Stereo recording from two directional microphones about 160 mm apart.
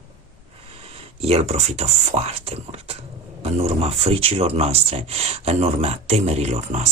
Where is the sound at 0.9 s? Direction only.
40° right (ahead or behind).